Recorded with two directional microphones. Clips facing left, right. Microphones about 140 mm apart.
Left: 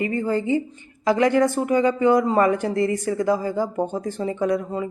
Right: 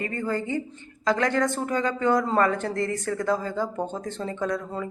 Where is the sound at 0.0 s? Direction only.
15° left (ahead or behind).